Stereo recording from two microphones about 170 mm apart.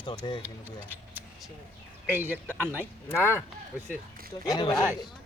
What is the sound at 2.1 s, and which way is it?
Speech, 15° right (ahead or behind).